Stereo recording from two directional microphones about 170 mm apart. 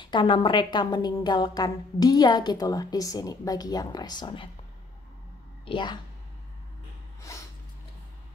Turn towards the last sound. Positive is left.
turn(degrees=15)  # may be behind; listen again after turning